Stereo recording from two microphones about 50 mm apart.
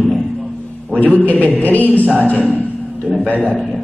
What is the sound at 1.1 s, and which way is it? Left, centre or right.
Speech, left.